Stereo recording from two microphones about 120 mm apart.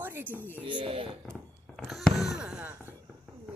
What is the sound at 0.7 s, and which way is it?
Speech, 45° right (ahead or behind).